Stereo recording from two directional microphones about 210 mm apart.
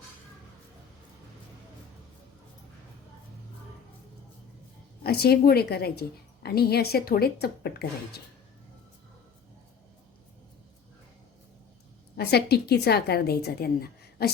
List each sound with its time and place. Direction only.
5.0 s a woman's voice: 50° left (ahead or behind)
12.1 s a woman's voice: 50° left (ahead or behind)